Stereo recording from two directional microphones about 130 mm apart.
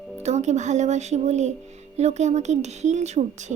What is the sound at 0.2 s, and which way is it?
A child's voice, 60° right (ahead or behind).